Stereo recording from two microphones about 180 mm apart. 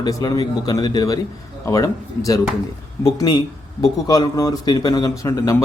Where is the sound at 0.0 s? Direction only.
20° left (ahead or behind).